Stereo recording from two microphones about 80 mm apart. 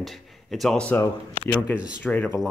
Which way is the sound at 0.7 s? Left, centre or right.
Centre.